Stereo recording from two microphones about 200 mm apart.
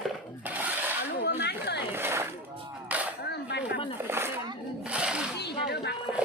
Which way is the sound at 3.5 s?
60° left (ahead or behind).